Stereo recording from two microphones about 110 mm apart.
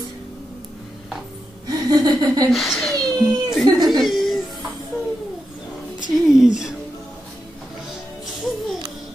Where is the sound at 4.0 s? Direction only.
Centre (ahead or behind).